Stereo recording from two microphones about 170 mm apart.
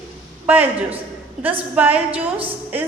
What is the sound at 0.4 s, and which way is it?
A woman's voice, 10° right (ahead or behind).